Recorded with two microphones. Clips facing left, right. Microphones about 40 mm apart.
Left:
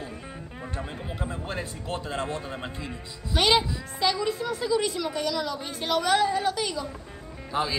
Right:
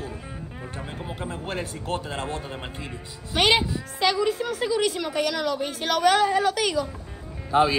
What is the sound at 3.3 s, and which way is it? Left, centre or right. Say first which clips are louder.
Speech: right 1 dB; right.